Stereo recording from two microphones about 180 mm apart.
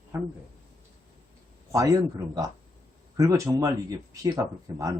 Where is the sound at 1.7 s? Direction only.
20° right (ahead or behind).